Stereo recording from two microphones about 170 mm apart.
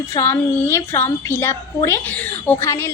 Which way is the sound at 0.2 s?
15° left (ahead or behind).